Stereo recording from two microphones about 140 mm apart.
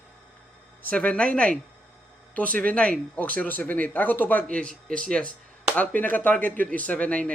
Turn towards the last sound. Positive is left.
turn(degrees=10)  # may be behind; listen again after turning